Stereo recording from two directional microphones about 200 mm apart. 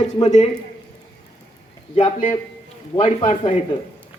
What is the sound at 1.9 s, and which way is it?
Speech, 30° left (ahead or behind).